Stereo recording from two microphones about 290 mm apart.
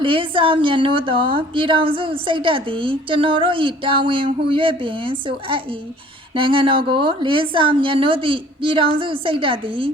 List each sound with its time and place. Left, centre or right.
0.0 s a woman's voice: centre